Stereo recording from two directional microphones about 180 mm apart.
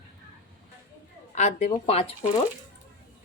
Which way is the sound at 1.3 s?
35° left (ahead or behind).